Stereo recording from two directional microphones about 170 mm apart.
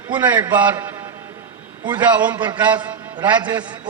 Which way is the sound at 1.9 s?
10° right (ahead or behind).